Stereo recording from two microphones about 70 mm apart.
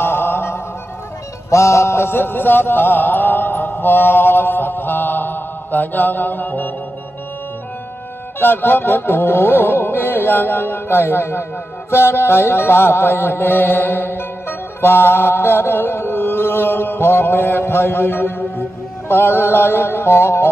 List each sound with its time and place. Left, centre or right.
0.0 s music: left
1.5 s mantra: left
8.4 s music: left
14.8 s chant: left
19.0 s music: left